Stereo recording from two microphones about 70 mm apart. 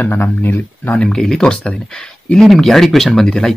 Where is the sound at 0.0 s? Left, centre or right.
Left.